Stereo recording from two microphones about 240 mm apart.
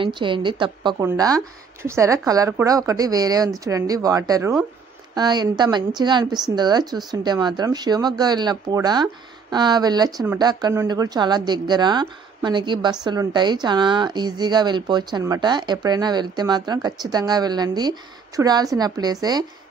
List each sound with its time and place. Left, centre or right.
0.0 s speech: centre